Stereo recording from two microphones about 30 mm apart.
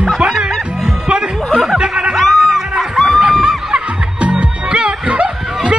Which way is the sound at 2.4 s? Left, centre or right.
Centre.